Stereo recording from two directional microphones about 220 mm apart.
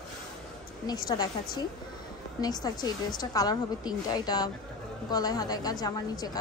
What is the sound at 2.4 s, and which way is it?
A woman's voice, 20° left (ahead or behind).